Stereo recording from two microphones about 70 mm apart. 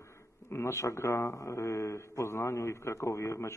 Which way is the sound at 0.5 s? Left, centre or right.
Left.